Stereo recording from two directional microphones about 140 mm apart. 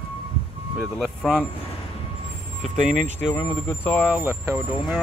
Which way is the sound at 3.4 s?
10° left (ahead or behind).